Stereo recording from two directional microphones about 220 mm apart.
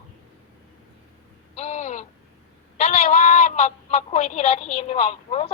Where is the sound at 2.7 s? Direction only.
30° left (ahead or behind).